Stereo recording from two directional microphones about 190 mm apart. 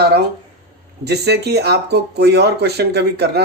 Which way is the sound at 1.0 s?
60° right (ahead or behind).